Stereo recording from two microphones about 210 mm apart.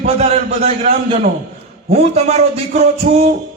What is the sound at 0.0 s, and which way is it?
Speech, 30° right (ahead or behind).